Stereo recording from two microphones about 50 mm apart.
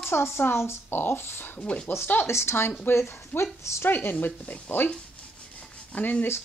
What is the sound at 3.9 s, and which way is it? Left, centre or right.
Speech, left.